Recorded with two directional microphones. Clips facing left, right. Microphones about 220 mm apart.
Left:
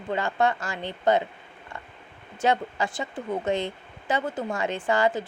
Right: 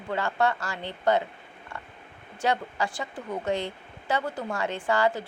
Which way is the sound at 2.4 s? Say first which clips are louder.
Left 3 dB; 20° left (ahead or behind).